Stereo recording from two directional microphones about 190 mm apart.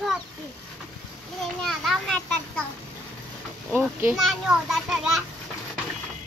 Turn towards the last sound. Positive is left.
turn(degrees=0)  # may be behind; listen again after turning